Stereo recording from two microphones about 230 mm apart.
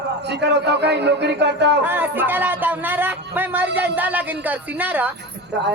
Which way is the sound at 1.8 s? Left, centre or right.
Centre.